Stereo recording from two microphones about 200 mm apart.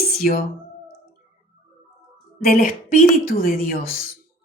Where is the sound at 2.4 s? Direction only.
45° left (ahead or behind).